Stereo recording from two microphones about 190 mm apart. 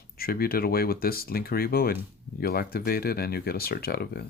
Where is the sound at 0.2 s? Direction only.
50° left (ahead or behind).